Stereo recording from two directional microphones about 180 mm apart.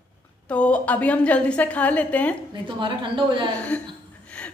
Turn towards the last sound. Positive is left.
turn(degrees=5)  # may be behind; listen again after turning